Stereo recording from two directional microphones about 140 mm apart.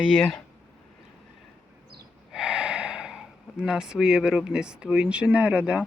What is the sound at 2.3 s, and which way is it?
Speech, 5° right (ahead or behind).